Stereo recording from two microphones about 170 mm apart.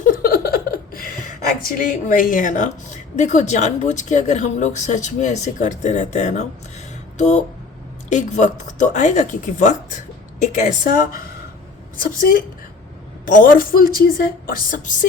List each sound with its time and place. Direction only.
0.0 s a woman's voice: 55° left (ahead or behind)